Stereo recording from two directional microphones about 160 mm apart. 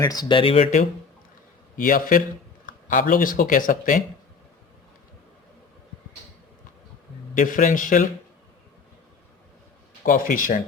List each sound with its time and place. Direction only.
0.0 s speech: 25° left (ahead or behind); by 0.9 s 45° left (ahead or behind)
1.7 s a man's voice: 60° left (ahead or behind)
7.3 s a man's voice: 55° left (ahead or behind)
10.0 s a man's voice: 55° left (ahead or behind)